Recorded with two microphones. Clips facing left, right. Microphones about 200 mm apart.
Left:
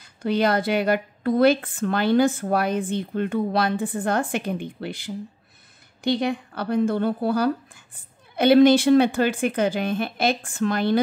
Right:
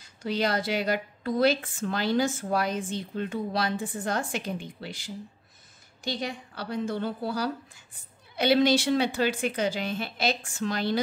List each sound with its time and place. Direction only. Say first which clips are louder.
0.0 s a woman's voice: left 6 dB; 55° left (ahead or behind)